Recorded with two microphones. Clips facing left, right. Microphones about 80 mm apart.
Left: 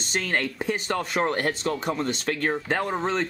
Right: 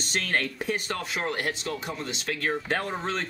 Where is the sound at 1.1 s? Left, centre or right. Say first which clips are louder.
Left 5 dB; left.